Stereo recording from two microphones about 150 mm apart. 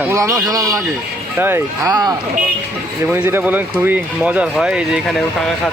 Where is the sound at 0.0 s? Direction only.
20° right (ahead or behind).